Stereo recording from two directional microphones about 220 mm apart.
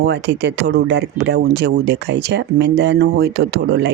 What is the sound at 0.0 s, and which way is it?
Speech, 50° right (ahead or behind).